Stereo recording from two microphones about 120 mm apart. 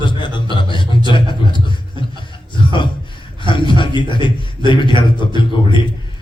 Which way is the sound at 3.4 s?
40° left (ahead or behind).